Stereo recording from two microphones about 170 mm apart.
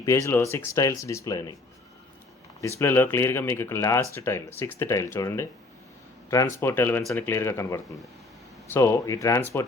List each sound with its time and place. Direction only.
0.0 s speech: 20° left (ahead or behind)
2.6 s speech: 15° left (ahead or behind)
6.6 s speech: 15° left (ahead or behind)